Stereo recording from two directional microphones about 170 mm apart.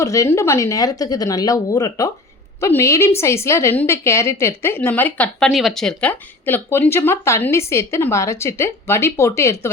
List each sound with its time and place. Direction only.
0.0 s a woman's voice: 20° left (ahead or behind)